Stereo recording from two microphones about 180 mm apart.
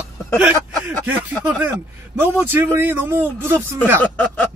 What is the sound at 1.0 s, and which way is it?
A man's voice, 10° right (ahead or behind).